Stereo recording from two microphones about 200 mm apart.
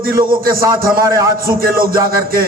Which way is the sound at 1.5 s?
45° right (ahead or behind).